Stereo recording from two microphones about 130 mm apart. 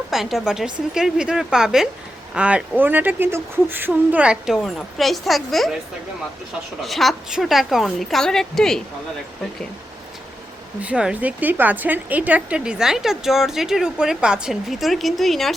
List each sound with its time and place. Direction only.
0.1 s a woman's voice: centre (ahead or behind)
6.8 s a woman's voice: centre (ahead or behind)
10.8 s a woman's voice: 10° right (ahead or behind)